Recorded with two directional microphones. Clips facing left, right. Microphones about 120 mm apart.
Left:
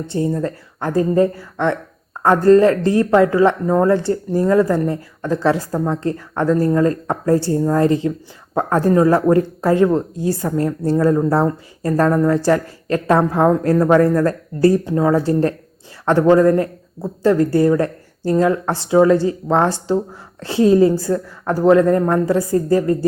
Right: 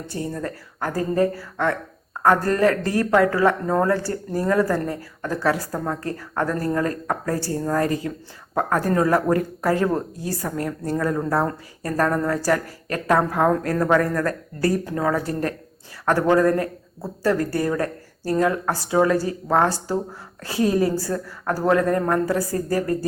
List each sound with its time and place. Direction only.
0.1 s a woman's voice: 25° left (ahead or behind)
12.1 s speech: 15° left (ahead or behind)
12.4 s a woman's voice: 25° left (ahead or behind)